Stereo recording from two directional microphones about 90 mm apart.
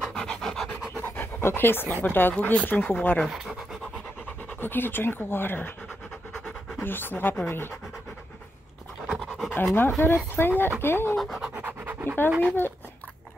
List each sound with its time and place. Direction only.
0.0 s pant: 5° left (ahead or behind)
0.9 s pant: 25° left (ahead or behind)
2.0 s speech: 20° left (ahead or behind)
3.3 s speech: 5° right (ahead or behind)
4.6 s speech: 25° left (ahead or behind)
6.4 s pant: 25° left (ahead or behind)
7.4 s speech: 25° left (ahead or behind)
9.0 s dog: 5° left (ahead or behind)
10.0 s speech: 25° left (ahead or behind)
11.1 s pant: centre (ahead or behind)
11.5 s scratch: 20° right (ahead or behind)
12.4 s speech: 25° left (ahead or behind)